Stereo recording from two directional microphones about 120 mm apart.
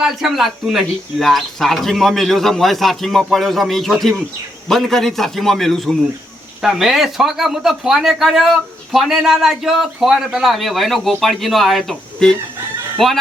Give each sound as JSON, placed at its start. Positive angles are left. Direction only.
{"t": 0.0, "sound": "speech", "side_deg": -5}